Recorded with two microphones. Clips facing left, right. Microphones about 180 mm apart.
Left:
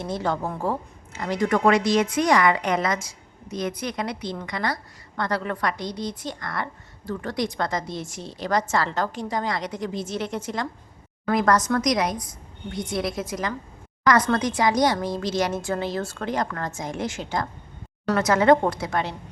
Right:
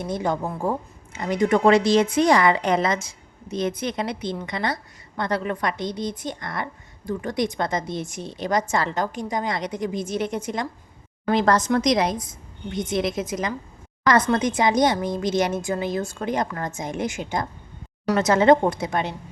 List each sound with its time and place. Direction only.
0.0 s a woman's voice: 15° right (ahead or behind)